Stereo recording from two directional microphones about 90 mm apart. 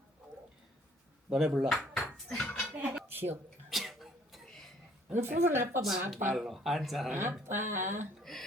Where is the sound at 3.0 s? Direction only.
25° right (ahead or behind).